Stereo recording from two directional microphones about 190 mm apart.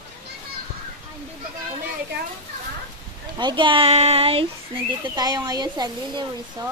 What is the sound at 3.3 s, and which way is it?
Speech, 25° right (ahead or behind).